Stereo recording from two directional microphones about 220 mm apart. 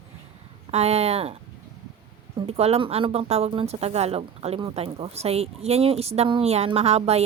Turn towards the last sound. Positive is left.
turn(degrees=-30)  # may be behind; listen again after turning